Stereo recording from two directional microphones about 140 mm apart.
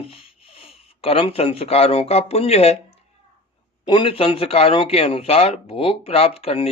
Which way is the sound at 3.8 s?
35° left (ahead or behind).